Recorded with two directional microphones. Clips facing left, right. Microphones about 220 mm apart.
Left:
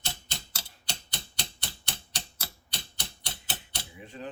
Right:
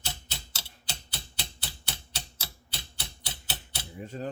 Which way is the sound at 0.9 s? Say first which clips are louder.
Left 1 dB; 5° right (ahead or behind).